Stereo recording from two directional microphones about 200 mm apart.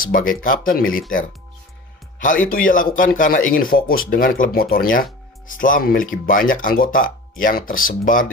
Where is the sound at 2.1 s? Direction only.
40° left (ahead or behind).